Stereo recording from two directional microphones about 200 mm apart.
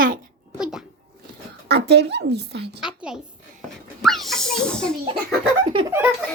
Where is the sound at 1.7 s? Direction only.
55° right (ahead or behind).